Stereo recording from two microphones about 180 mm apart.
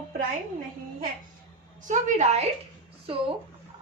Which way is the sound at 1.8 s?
40° right (ahead or behind).